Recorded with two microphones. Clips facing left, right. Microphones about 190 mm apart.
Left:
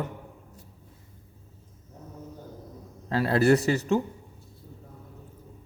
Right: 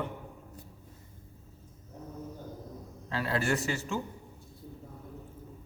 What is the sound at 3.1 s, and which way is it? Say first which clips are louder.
Speech: left 9 dB; 40° left (ahead or behind).